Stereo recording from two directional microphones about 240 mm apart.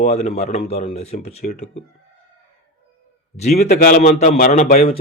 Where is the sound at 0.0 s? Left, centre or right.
Left.